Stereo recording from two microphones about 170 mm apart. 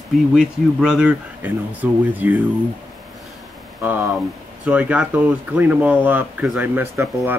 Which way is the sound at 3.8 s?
10° right (ahead or behind).